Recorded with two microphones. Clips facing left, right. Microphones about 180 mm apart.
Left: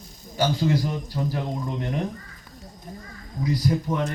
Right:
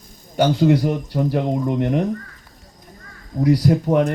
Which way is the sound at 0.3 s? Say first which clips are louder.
Right 7 dB; 65° right (ahead or behind).